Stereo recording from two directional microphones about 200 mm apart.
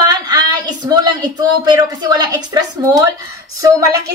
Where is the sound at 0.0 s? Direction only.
20° right (ahead or behind).